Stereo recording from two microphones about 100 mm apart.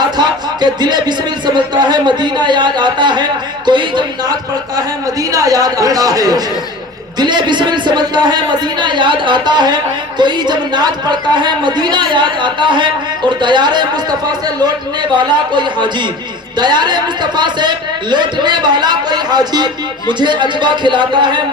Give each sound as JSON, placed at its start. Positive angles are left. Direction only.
{"t": 0.2, "sound": "music", "side_deg": -45}
{"t": 3.7, "sound": "a man's voice", "side_deg": -50}
{"t": 7.2, "sound": "a man's voice", "side_deg": -50}